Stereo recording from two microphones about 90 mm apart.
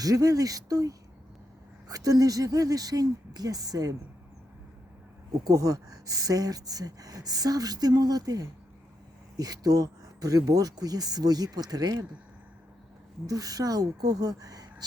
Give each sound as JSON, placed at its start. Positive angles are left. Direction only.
{"t": 0.0, "sound": "speech", "side_deg": -40}
{"t": 5.5, "sound": "speech", "side_deg": -40}
{"t": 13.2, "sound": "speech", "side_deg": -40}